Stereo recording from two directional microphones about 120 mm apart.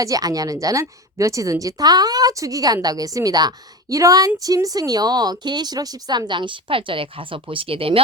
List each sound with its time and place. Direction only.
0.0 s a woman's voice: 30° right (ahead or behind); by 8.0 s 50° right (ahead or behind)